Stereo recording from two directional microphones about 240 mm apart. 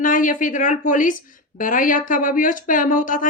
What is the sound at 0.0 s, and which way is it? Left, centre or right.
A woman's voice, left.